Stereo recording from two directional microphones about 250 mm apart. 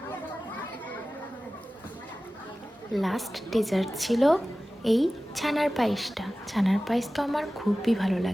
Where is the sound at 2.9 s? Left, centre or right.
Centre.